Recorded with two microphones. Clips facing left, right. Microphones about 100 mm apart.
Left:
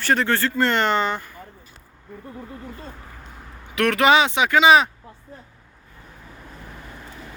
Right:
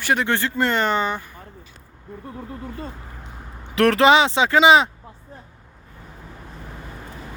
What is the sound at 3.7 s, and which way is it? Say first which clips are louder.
Speech: right 2 dB; 35° right (ahead or behind).